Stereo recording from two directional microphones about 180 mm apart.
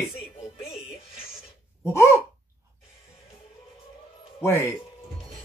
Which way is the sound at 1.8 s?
15° left (ahead or behind).